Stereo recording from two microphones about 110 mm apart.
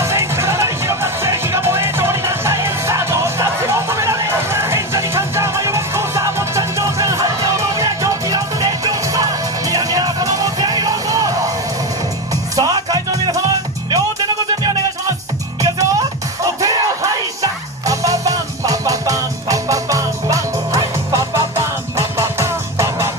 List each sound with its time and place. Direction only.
0.0 s music: 25° right (ahead or behind)
12.5 s music: 35° right (ahead or behind)
15.6 s music: 35° right (ahead or behind)